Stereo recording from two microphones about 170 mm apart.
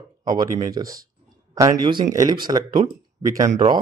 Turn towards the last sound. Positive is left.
turn(degrees=-25)  # may be behind; listen again after turning